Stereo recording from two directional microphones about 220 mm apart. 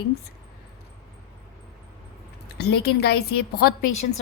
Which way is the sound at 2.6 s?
50° left (ahead or behind).